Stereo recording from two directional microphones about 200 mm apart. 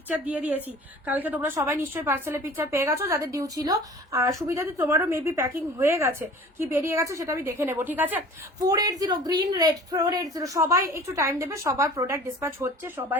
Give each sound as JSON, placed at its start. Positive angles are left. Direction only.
{"t": 0.3, "sound": "a woman's voice", "side_deg": -10}